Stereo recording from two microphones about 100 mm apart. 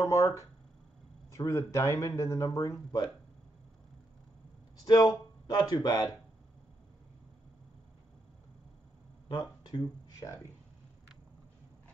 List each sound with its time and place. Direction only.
0.0 s speech: 30° left (ahead or behind)
4.8 s speech: 40° left (ahead or behind)
9.3 s speech: 45° left (ahead or behind)